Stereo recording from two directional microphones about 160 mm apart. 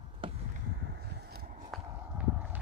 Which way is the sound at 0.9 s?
90° right.